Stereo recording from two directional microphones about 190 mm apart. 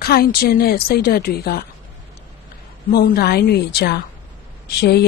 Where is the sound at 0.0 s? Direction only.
55° left (ahead or behind).